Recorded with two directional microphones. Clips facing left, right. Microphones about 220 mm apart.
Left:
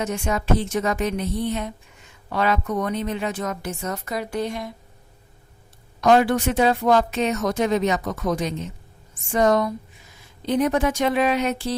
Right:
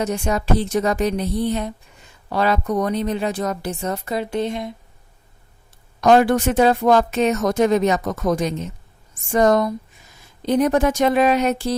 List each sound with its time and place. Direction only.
0.0 s a woman's voice: 35° right (ahead or behind)
6.0 s speech: 45° right (ahead or behind)